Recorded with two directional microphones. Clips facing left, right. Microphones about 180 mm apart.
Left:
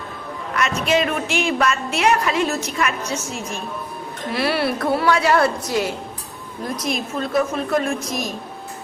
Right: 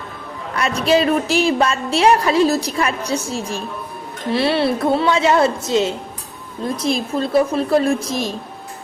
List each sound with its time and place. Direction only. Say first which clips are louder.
0.5 s a woman's voice: right 3 dB; 35° right (ahead or behind)